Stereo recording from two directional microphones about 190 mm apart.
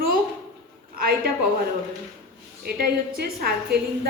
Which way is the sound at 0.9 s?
55° right (ahead or behind).